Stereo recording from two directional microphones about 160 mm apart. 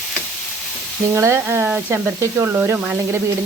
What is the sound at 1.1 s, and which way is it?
Speech, 15° right (ahead or behind).